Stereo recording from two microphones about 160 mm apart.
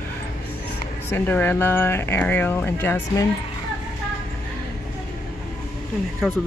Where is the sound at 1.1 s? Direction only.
10° left (ahead or behind).